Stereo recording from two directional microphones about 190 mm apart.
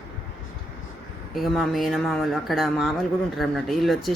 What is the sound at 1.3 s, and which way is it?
Speech, centre (ahead or behind).